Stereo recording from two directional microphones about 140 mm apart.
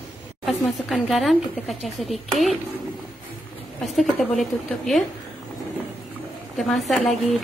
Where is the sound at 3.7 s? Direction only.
Centre (ahead or behind).